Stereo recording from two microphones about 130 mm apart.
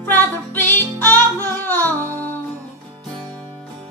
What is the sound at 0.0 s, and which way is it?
Music, 15° left (ahead or behind).